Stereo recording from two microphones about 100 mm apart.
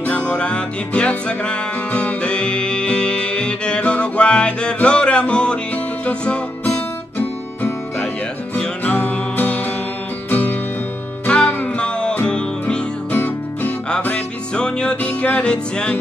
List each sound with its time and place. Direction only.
0.0 s music: 10° left (ahead or behind)
13.2 s music: 20° left (ahead or behind)